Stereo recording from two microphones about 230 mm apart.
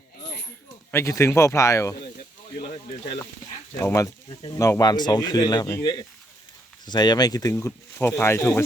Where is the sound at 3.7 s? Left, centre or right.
Centre.